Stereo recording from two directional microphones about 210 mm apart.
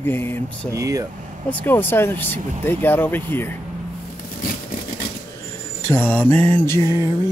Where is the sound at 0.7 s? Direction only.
15° right (ahead or behind).